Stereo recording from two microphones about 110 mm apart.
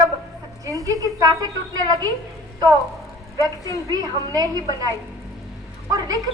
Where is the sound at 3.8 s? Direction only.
30° right (ahead or behind).